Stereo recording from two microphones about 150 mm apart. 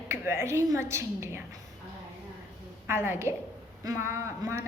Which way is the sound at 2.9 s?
15° right (ahead or behind).